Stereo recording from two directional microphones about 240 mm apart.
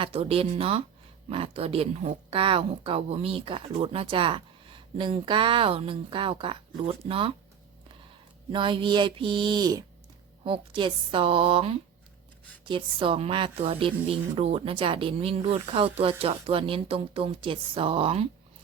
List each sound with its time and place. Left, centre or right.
0.0 s a woman's voice: right
8.5 s a woman's voice: right